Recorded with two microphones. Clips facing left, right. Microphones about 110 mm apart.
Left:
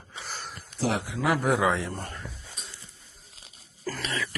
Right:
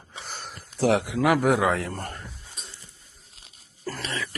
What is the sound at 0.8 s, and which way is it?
Speech, 90° right.